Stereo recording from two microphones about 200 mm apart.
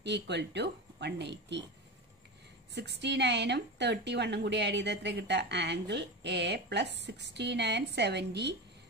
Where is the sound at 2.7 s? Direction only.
60° right (ahead or behind).